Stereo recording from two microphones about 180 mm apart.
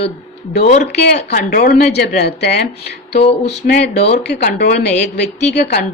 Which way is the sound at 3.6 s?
50° left (ahead or behind).